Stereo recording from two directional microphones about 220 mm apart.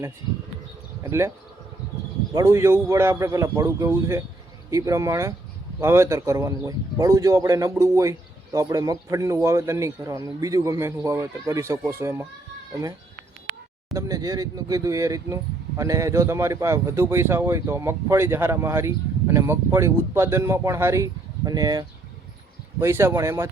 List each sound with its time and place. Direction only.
1.0 s speech: 10° right (ahead or behind)
2.3 s speech: 15° right (ahead or behind)
13.9 s speech: 15° right (ahead or behind)